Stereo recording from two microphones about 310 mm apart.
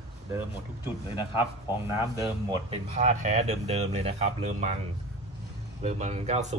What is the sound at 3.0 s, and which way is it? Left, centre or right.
Speech, right.